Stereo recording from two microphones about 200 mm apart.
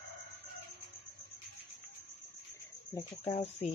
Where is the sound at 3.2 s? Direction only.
30° left (ahead or behind).